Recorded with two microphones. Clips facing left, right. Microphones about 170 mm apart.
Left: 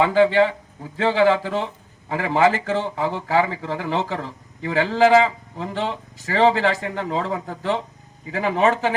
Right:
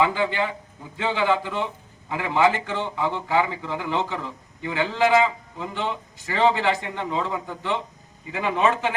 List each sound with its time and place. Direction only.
0.0 s a man's voice: 35° left (ahead or behind)